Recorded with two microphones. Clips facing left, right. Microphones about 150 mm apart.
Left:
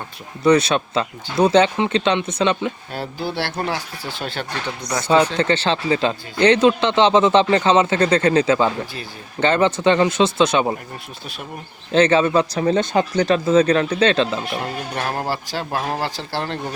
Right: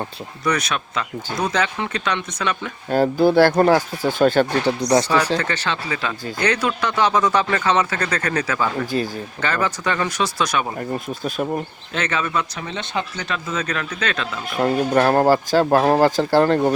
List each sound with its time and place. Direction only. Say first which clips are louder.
0.4 s speech: left 7 dB; 30° left (ahead or behind)
2.9 s speech: right 11 dB; 45° right (ahead or behind)
5.0 s speech: left 3 dB; 25° left (ahead or behind)
11.9 s speech: left 8 dB; 30° left (ahead or behind)
14.6 s speech: right 9 dB; 55° right (ahead or behind)